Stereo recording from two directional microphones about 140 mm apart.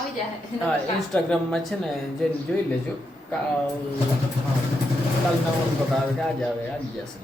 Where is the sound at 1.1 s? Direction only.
5° left (ahead or behind).